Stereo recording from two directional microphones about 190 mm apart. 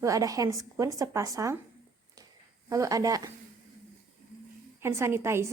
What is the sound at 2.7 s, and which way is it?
Speech, 15° right (ahead or behind).